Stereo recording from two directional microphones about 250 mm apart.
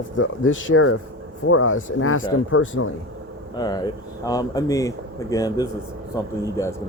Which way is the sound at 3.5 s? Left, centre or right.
Centre.